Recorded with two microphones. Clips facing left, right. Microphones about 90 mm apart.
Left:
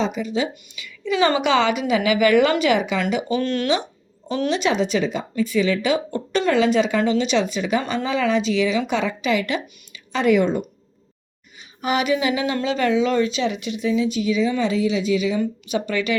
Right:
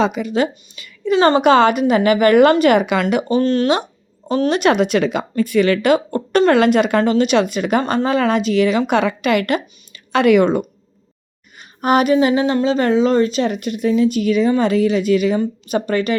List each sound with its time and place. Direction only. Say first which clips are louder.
0.0 s speech: right 5 dB; 65° right (ahead or behind)
3.2 s speech: right 6 dB; 35° right (ahead or behind)
4.5 s a woman's voice: right 5 dB; 60° right (ahead or behind)
11.8 s a woman's voice: right 7 dB; 50° right (ahead or behind)
15.7 s speech: right 5 dB; 45° right (ahead or behind)